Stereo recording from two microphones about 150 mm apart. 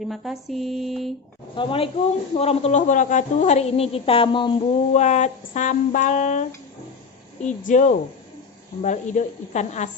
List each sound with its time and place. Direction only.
0.1 s mantra: centre (ahead or behind)
1.5 s a woman's voice: 35° left (ahead or behind)
4.9 s a woman's voice: 50° left (ahead or behind)